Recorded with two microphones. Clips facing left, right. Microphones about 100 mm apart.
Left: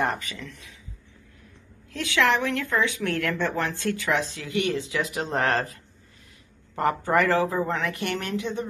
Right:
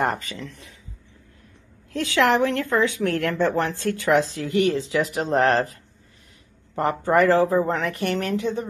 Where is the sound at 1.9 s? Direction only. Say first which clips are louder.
Right 3 dB; 35° right (ahead or behind).